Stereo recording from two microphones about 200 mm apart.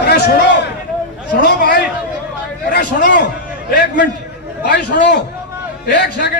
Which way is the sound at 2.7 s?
60° left (ahead or behind).